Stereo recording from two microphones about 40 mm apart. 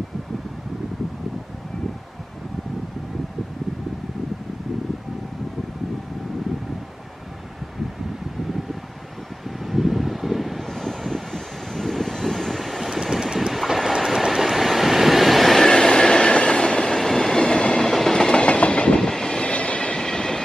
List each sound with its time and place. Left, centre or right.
9.7 s wind: centre
10.6 s vehicle: centre
13.0 s vehicle: centre
14.0 s train: centre
15.6 s train: centre
17.4 s train: left
19.0 s train: centre